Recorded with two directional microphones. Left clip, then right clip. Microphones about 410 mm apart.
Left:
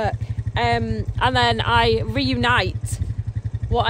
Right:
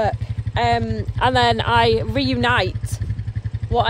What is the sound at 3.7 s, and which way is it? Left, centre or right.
Speech, centre.